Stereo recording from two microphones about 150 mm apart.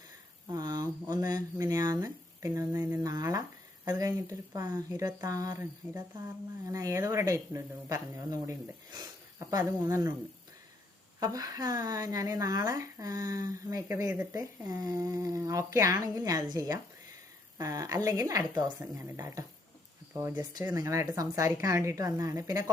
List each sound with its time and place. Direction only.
0.4 s a sound: 25° right (ahead or behind)
3.8 s speech: 25° right (ahead or behind)
11.2 s speech: 25° right (ahead or behind)